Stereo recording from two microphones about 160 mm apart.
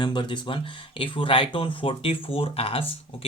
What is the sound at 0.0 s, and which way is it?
Speech, 30° left (ahead or behind).